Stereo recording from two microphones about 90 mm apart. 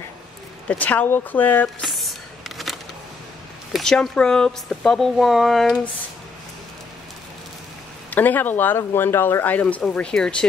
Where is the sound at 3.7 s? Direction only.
5° left (ahead or behind).